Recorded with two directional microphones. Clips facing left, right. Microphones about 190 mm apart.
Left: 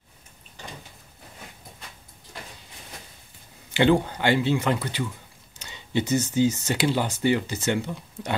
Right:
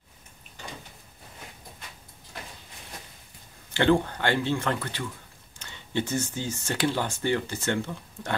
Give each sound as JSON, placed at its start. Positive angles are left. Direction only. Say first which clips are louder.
{"t": 3.7, "sound": "speech", "louder": "left 2 dB", "side_deg": 10}